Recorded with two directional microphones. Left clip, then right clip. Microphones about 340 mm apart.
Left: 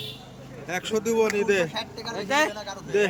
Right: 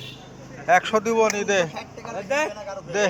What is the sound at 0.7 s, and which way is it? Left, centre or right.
Speech, centre.